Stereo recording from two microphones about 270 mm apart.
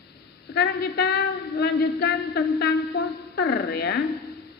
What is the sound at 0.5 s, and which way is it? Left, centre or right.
A woman's voice, left.